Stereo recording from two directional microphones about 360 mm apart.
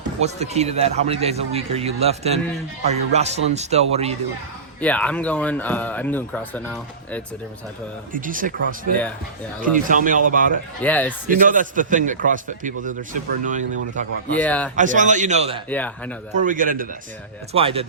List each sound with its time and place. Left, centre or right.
0.2 s a man's voice: centre
4.8 s speech: centre
8.1 s a man's voice: right
10.8 s speech: centre
11.3 s a man's voice: right
14.3 s speech: centre
14.8 s a man's voice: right
15.7 s speech: centre
16.3 s a man's voice: right